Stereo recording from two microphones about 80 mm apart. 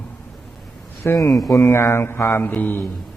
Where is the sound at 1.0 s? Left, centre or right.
Left.